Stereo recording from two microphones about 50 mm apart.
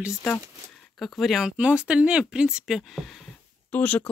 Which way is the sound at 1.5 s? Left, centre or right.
Right.